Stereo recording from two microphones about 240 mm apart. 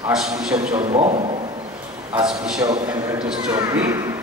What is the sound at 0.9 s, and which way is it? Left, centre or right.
Speech, right.